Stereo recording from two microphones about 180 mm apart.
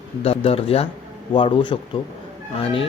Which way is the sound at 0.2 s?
35° left (ahead or behind).